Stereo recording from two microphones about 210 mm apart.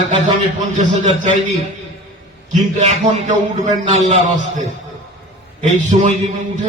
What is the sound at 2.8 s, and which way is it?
A man's voice, 35° right (ahead or behind).